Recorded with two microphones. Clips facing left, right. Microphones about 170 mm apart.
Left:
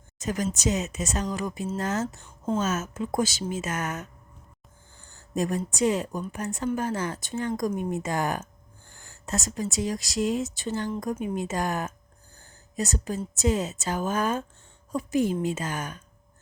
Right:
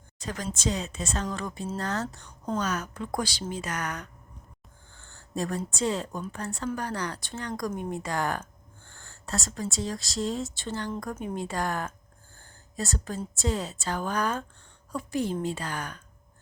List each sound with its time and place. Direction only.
0.2 s speech: 20° left (ahead or behind)
2.2 s a woman's voice: 5° left (ahead or behind)
2.6 s speech: 25° left (ahead or behind)
5.1 s a woman's voice: 20° left (ahead or behind)